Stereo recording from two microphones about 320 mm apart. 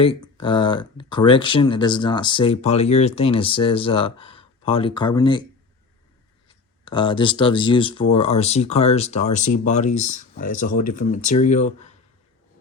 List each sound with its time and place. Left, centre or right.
0.0 s speech: centre
6.5 s speech: centre